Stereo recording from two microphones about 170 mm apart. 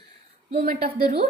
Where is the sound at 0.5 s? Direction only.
55° right (ahead or behind).